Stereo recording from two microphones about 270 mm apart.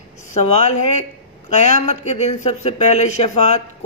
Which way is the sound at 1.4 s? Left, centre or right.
Left.